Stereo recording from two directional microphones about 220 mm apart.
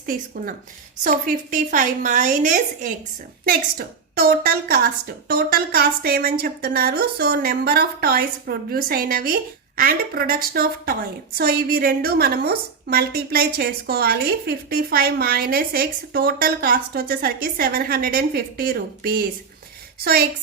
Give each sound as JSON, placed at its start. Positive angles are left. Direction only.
{"t": 0.0, "sound": "a woman's voice", "side_deg": -40}